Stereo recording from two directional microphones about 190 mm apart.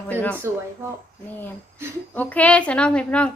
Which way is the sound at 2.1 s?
5° left (ahead or behind).